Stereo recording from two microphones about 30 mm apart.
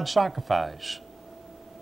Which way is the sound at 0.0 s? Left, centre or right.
Centre.